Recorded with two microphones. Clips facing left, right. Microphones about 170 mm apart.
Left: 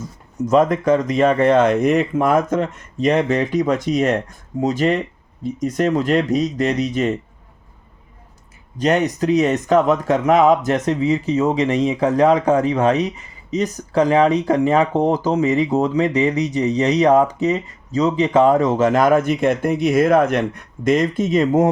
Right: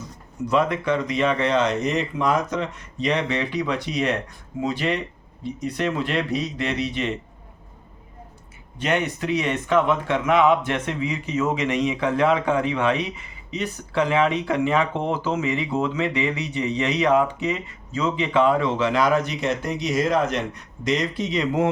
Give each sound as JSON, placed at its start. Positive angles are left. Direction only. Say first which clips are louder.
{"t": 0.4, "sound": "speech", "louder": "left 6 dB", "side_deg": 45}
{"t": 8.8, "sound": "speech", "louder": "left 6 dB", "side_deg": 40}